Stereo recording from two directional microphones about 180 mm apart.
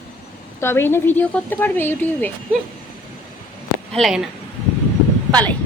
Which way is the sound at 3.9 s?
Centre (ahead or behind).